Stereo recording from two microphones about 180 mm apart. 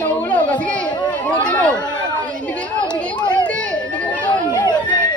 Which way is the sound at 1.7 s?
25° left (ahead or behind).